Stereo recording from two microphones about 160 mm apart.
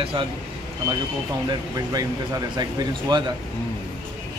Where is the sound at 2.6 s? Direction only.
25° right (ahead or behind).